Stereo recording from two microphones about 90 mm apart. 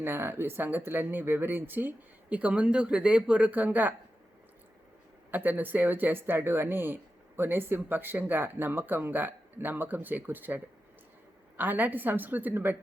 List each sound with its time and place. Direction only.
0.0 s speech: 25° right (ahead or behind)
5.3 s speech: 20° right (ahead or behind)